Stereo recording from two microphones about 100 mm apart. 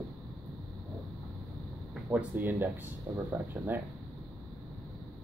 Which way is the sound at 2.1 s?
20° right (ahead or behind).